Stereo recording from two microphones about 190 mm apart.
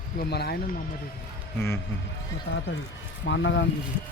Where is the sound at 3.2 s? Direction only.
70° left (ahead or behind).